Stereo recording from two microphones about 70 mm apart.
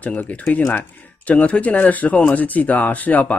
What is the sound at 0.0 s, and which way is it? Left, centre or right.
Speech, centre.